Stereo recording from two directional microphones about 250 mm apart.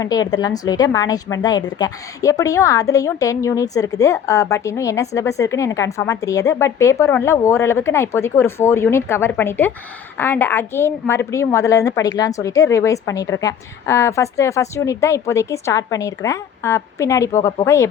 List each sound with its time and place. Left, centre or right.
0.0 s a woman's voice: centre